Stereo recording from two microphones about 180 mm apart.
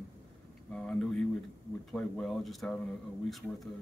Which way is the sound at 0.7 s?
5° left (ahead or behind).